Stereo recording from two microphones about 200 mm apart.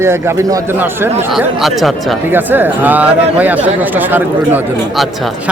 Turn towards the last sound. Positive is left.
turn(degrees=-10)  # may be behind; listen again after turning